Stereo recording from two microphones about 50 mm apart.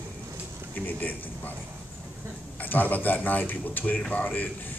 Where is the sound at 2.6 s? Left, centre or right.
Left.